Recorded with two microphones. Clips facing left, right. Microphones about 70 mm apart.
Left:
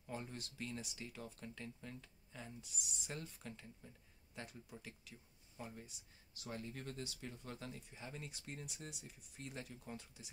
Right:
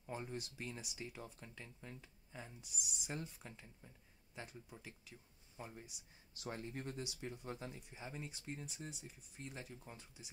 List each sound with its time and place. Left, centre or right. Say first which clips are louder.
0.0 s speech: right 2 dB; centre
6.4 s speech: right 2 dB; right; by 8.3 s centre
8.3 s speech: right 2 dB; centre